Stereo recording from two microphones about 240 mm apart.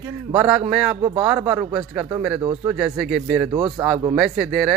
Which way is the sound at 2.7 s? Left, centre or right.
Centre.